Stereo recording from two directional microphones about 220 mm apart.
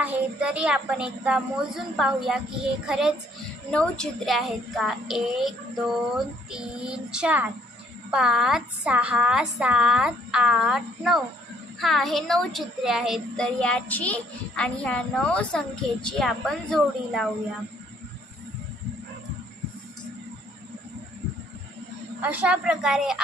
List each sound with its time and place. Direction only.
0.0 s a child's voice: 5° right (ahead or behind)
22.2 s a child's voice: 5° right (ahead or behind)